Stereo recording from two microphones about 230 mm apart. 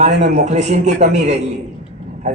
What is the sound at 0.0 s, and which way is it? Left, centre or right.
A man's voice, right.